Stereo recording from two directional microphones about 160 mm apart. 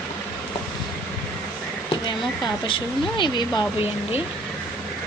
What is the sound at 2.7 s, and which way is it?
Speech, 30° left (ahead or behind).